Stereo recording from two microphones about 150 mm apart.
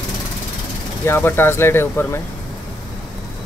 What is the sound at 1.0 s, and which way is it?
Speech, 15° left (ahead or behind).